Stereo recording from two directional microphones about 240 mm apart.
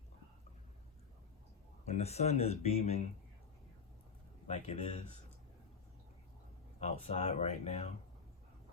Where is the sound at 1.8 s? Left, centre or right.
Left.